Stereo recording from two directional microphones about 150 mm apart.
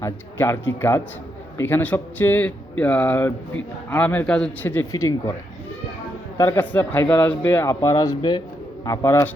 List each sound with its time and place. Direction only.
0.0 s speech: 15° left (ahead or behind)
6.3 s speech: 20° left (ahead or behind)